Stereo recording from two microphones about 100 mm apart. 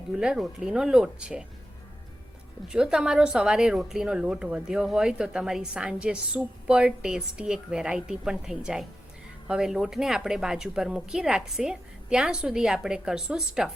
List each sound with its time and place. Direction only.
0.1 s a woman's voice: 5° right (ahead or behind)
2.6 s a woman's voice: 10° right (ahead or behind)